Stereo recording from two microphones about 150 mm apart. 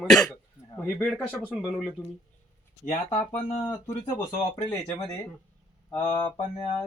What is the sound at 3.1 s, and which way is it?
Speech, 45° left (ahead or behind).